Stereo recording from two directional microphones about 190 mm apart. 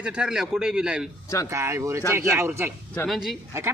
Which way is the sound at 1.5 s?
15° right (ahead or behind).